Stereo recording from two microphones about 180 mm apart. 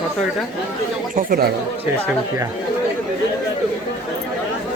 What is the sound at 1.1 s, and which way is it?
Speech, 55° right (ahead or behind).